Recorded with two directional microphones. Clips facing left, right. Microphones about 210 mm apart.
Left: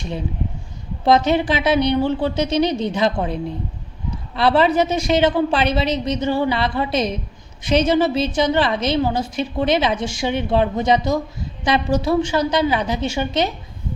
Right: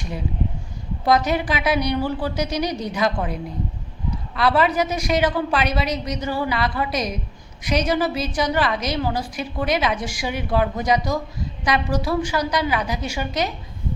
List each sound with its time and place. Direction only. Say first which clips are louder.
1.0 s a woman's voice: left 4 dB; 25° left (ahead or behind)
4.4 s a woman's voice: left 3 dB; 30° left (ahead or behind)